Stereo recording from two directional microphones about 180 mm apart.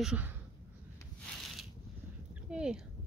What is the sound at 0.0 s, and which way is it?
Speech, 5° right (ahead or behind).